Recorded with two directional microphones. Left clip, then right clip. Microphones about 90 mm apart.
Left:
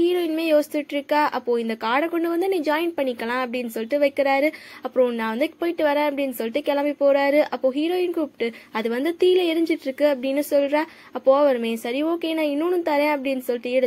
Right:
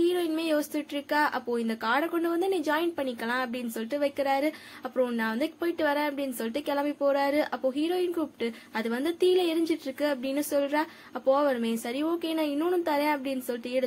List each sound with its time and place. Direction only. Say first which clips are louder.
0.0 s a woman's voice: left 5 dB; 35° left (ahead or behind)